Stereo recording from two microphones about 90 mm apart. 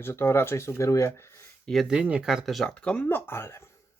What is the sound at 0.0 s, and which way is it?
Speech, 25° left (ahead or behind).